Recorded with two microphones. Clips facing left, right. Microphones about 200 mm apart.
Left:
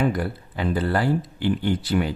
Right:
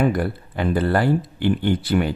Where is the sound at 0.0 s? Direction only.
55° right (ahead or behind).